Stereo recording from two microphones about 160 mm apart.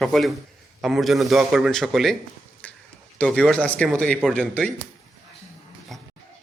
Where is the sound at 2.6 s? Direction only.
10° left (ahead or behind).